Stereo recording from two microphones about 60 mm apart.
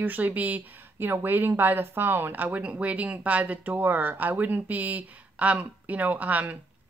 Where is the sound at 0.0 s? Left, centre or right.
Right.